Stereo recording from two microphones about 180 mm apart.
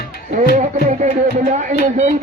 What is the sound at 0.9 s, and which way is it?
Speech, 40° right (ahead or behind).